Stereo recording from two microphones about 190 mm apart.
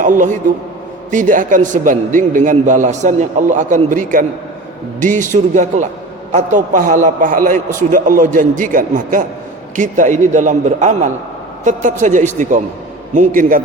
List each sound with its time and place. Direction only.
0.0 s a man's voice: 45° right (ahead or behind)